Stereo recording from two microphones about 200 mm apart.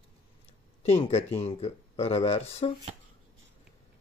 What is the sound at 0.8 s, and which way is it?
Speech, 30° left (ahead or behind).